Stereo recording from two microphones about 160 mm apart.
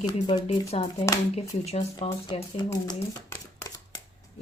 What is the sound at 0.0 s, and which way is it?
Speech, 35° left (ahead or behind).